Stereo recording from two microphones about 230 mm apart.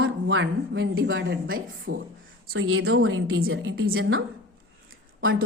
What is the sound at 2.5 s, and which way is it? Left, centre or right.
A woman's voice, right.